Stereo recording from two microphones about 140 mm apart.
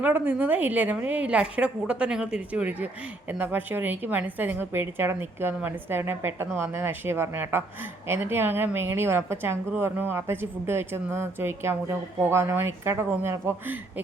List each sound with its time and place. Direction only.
0.0 s a woman's voice: 15° right (ahead or behind)